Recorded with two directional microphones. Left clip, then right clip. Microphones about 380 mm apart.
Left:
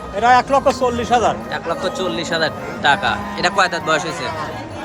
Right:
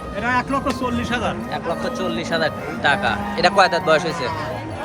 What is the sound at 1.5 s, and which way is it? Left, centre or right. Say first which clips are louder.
Speech: left 3 dB; centre.